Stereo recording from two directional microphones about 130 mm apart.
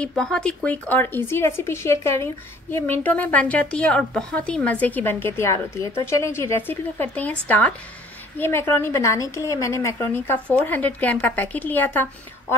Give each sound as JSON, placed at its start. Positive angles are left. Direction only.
{"t": 0.0, "sound": "a woman's voice", "side_deg": 5}